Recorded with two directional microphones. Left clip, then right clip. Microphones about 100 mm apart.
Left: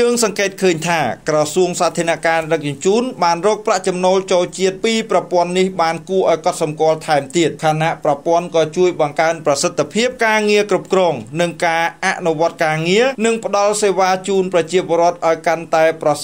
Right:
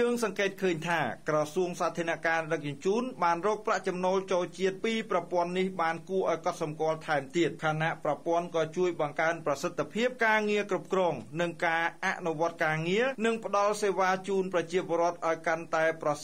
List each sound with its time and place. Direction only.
0.0 s speech: 35° left (ahead or behind)